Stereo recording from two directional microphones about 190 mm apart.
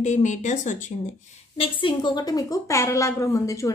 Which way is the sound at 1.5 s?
25° left (ahead or behind).